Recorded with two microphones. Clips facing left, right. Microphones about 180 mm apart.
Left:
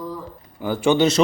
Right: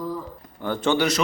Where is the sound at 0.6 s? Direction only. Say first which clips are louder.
Left 4 dB; 10° left (ahead or behind).